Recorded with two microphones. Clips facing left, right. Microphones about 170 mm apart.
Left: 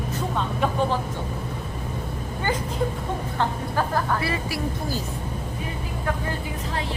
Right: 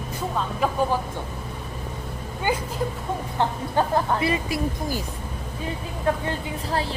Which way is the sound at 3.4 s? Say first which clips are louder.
Right 3 dB; 20° right (ahead or behind).